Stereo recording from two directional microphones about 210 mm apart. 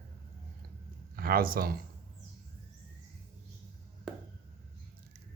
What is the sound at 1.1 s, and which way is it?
Speech, 45° right (ahead or behind).